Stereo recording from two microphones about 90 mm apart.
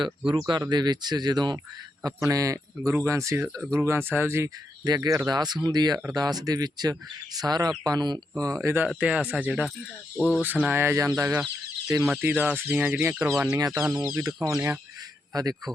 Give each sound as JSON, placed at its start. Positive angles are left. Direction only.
{"t": 0.3, "sound": "speech", "side_deg": -55}
{"t": 2.0, "sound": "speech", "side_deg": -40}
{"t": 4.9, "sound": "speech", "side_deg": -40}
{"t": 8.4, "sound": "speech", "side_deg": -35}
{"t": 9.0, "sound": "speech", "side_deg": -15}
{"t": 10.2, "sound": "speech", "side_deg": 20}
{"t": 10.4, "sound": "speech", "side_deg": -20}
{"t": 12.2, "sound": "speech", "side_deg": -20}
{"t": 13.5, "sound": "speech", "side_deg": -40}